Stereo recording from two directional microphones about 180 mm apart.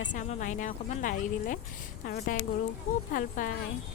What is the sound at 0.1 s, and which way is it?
Speech, 45° left (ahead or behind).